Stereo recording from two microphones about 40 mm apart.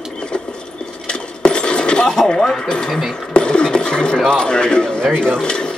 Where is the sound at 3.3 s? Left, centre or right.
Left.